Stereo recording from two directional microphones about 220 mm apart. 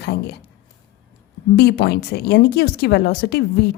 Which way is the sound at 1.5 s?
45° left (ahead or behind).